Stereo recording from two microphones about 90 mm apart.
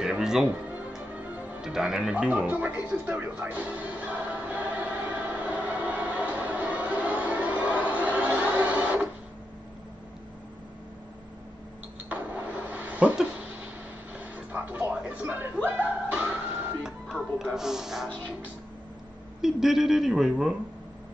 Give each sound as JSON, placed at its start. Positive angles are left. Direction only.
{"t": 0.0, "sound": "speech", "side_deg": -5}
{"t": 1.6, "sound": "music", "side_deg": -5}
{"t": 12.6, "sound": "a sound", "side_deg": -15}
{"t": 19.4, "sound": "speech", "side_deg": -5}